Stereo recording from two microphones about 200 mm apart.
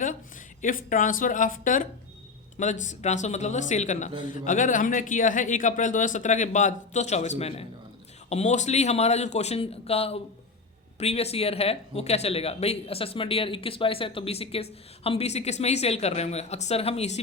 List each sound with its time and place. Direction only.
0.6 s speech: 40° left (ahead or behind)